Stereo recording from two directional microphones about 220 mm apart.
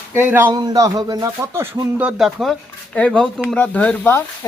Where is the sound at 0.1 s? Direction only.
10° right (ahead or behind).